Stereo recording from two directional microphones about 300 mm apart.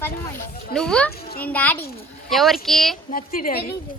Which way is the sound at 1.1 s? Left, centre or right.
Left.